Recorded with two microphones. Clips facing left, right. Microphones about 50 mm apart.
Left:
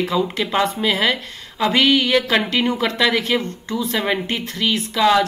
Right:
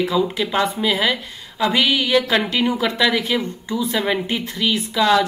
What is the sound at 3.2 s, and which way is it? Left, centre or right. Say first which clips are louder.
Speech: left 1 dB; centre.